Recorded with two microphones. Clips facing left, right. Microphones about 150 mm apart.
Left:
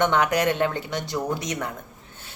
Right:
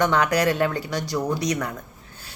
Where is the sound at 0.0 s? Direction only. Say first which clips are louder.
Right 1 dB; 20° left (ahead or behind).